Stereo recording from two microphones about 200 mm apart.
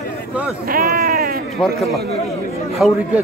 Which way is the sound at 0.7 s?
50° right (ahead or behind).